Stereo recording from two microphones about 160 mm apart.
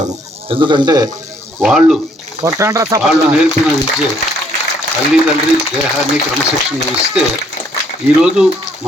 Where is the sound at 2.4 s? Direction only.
20° right (ahead or behind).